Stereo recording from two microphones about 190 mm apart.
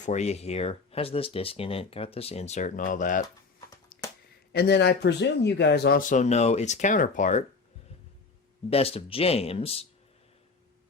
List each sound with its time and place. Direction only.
0.0 s speech: 35° left (ahead or behind)
4.5 s speech: 60° left (ahead or behind); by 7.4 s 40° left (ahead or behind)
8.7 s speech: 30° left (ahead or behind)